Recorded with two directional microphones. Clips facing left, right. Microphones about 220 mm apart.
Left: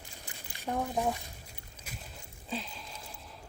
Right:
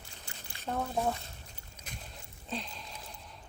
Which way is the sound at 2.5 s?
Centre (ahead or behind).